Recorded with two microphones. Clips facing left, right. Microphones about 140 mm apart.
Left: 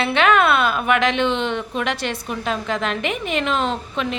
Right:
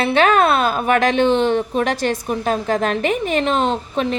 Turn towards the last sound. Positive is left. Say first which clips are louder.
# right 4 dB
turn(degrees=-40)  # may be behind; listen again after turning